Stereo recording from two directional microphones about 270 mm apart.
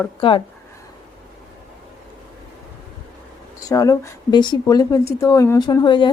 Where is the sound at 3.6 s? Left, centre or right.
Centre.